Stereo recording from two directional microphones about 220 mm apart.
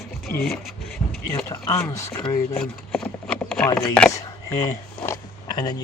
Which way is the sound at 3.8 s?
5° left (ahead or behind).